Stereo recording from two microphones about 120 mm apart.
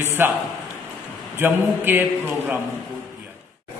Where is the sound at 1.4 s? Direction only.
15° right (ahead or behind).